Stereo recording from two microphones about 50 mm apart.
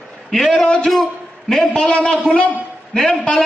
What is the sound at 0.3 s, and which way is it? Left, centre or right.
Speech, centre.